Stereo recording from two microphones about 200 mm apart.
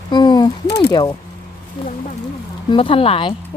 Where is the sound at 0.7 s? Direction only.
55° left (ahead or behind).